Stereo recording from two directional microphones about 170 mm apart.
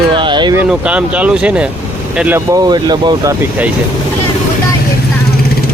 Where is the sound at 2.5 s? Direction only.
25° right (ahead or behind).